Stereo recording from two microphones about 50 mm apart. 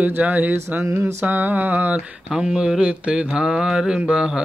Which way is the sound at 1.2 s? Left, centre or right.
Right.